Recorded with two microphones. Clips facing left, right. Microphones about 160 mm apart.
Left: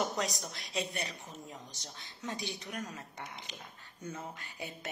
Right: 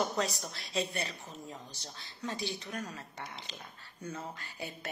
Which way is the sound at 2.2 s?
20° left (ahead or behind).